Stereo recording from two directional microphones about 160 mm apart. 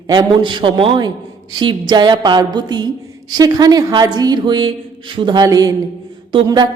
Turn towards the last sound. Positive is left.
turn(degrees=-25)  # may be behind; listen again after turning